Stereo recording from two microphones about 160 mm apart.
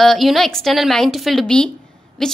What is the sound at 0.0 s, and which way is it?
A woman's voice, centre (ahead or behind).